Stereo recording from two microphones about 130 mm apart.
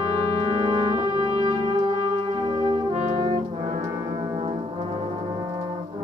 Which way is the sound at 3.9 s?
30° right (ahead or behind).